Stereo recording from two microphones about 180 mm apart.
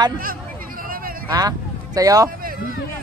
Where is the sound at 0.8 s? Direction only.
50° right (ahead or behind).